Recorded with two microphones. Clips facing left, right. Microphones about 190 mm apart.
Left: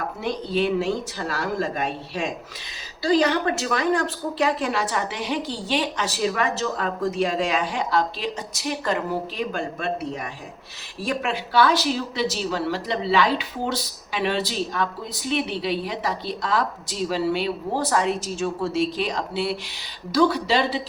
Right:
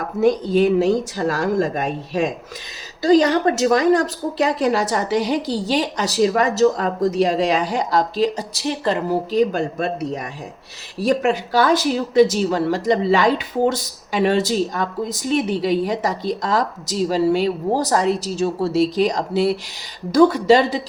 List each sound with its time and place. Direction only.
0.2 s a woman's voice: 45° right (ahead or behind)